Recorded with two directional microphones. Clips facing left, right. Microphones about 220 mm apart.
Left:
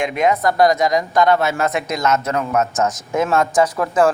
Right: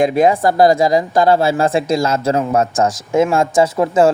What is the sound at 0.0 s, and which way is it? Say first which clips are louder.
A woman's voice: right 5 dB; 35° right (ahead or behind).